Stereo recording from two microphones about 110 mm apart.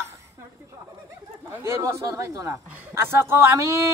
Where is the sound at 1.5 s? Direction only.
25° right (ahead or behind).